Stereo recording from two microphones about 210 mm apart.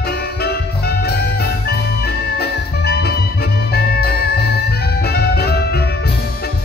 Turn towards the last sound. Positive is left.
turn(degrees=50)  # may be behind; listen again after turning